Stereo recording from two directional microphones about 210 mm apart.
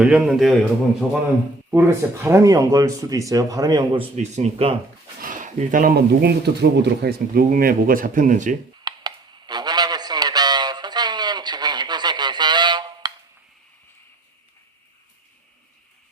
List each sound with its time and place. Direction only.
0.0 s a man's voice: 5° right (ahead or behind)
1.7 s speech: 10° right (ahead or behind)
4.2 s speech: 30° right (ahead or behind)
8.8 s a sound: 20° right (ahead or behind)